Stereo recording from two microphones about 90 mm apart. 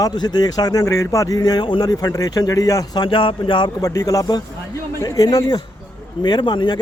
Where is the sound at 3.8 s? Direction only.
40° left (ahead or behind).